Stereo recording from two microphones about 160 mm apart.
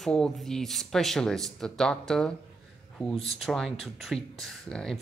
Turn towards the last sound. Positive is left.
turn(degrees=5)  # may be behind; listen again after turning